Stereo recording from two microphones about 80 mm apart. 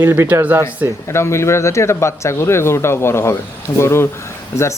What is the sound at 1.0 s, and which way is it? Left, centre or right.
Speech, left.